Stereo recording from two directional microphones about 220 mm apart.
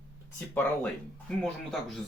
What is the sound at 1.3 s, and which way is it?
Speech, 5° left (ahead or behind).